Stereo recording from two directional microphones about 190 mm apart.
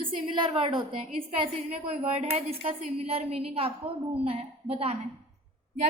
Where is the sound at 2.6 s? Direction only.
30° right (ahead or behind).